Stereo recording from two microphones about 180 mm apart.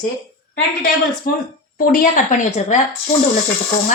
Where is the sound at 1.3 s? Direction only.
55° left (ahead or behind).